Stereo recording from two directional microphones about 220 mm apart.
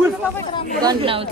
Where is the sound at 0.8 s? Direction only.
25° right (ahead or behind).